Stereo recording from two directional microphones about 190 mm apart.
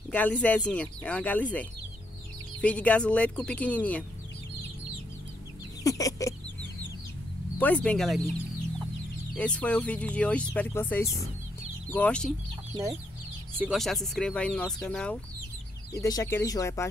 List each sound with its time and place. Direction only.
0.1 s speech: 5° left (ahead or behind)
5.9 s chicken: 20° left (ahead or behind)
7.5 s speech: 5° left (ahead or behind)
9.3 s speech: 5° left (ahead or behind)
13.6 s speech: centre (ahead or behind)
16.0 s speech: 15° left (ahead or behind)